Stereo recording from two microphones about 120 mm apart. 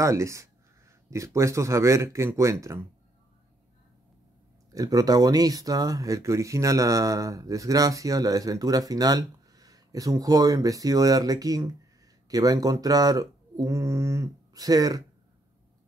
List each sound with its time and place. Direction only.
0.0 s speech: 25° right (ahead or behind)
4.7 s speech: 30° right (ahead or behind)